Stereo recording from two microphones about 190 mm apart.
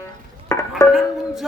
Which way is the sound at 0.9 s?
Centre (ahead or behind).